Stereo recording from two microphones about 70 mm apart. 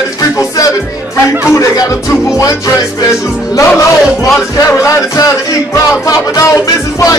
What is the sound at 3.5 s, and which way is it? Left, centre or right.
Music, left.